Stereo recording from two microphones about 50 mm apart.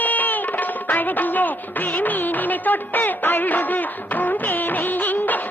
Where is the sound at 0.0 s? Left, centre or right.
Left.